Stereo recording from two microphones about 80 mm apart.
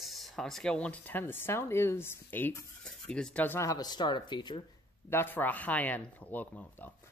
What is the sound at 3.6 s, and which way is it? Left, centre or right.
Speech, left.